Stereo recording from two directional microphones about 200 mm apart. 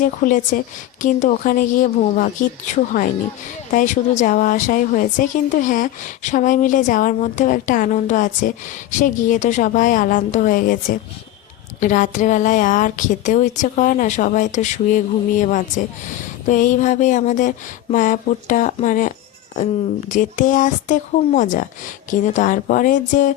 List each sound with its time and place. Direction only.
0.0 s a woman's voice: 45° left (ahead or behind)